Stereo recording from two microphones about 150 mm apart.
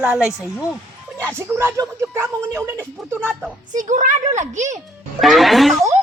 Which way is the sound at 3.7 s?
60° right (ahead or behind).